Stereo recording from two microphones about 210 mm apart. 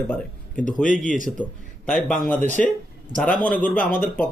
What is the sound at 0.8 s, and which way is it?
Speech, 40° left (ahead or behind).